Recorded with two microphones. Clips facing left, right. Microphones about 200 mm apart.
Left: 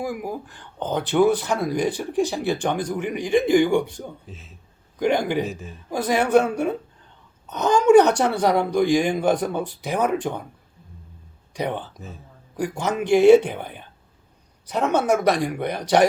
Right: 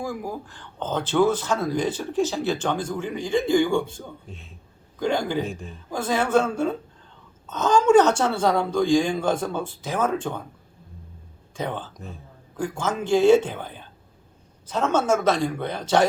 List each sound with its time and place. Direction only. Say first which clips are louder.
0.0 s a man's voice: left 2 dB; 15° left (ahead or behind)
4.3 s a man's voice: even; centre (ahead or behind)
4.9 s a man's voice: left 3 dB; 20° left (ahead or behind)
5.5 s a man's voice: left 1 dB; centre (ahead or behind)
5.9 s a man's voice: left 3 dB; 15° left (ahead or behind)
11.5 s a man's voice: left 3 dB; 15° left (ahead or behind)
11.9 s a man's voice: even; centre (ahead or behind)
12.6 s a man's voice: left 3 dB; 20° left (ahead or behind)